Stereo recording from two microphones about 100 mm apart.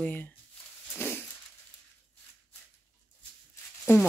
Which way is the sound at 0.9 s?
20° left (ahead or behind).